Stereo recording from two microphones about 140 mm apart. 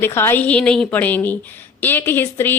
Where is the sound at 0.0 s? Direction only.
15° left (ahead or behind).